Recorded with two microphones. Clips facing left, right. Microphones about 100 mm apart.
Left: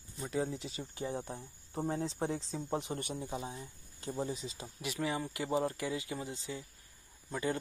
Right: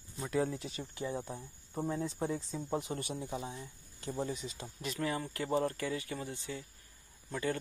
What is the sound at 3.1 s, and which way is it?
Speech, 15° left (ahead or behind).